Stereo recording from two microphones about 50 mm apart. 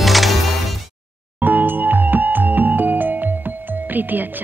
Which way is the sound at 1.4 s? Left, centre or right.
Right.